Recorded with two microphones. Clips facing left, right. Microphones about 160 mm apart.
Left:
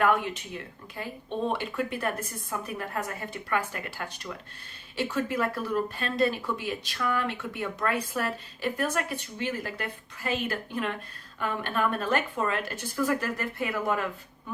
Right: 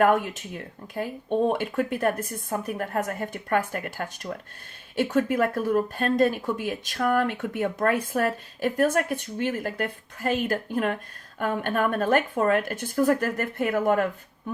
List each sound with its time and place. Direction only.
0.0 s speech: 45° right (ahead or behind)